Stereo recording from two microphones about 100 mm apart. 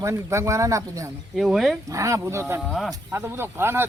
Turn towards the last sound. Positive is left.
turn(degrees=-25)  # may be behind; listen again after turning